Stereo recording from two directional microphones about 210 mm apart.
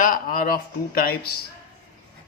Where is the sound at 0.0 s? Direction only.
40° left (ahead or behind).